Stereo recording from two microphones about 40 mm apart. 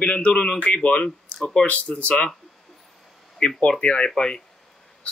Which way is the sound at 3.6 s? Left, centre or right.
Left.